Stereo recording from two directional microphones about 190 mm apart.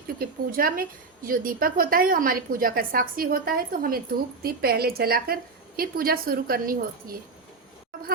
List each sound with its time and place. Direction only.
0.2 s a woman's voice: 50° right (ahead or behind)